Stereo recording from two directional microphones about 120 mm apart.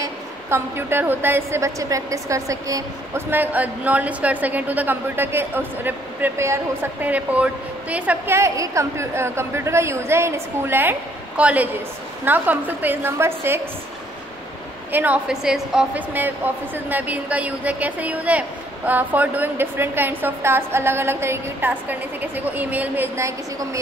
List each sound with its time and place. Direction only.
0.0 s a woman's voice: 20° right (ahead or behind)
8.4 s a woman's voice: 25° right (ahead or behind)
14.9 s a woman's voice: 15° right (ahead or behind)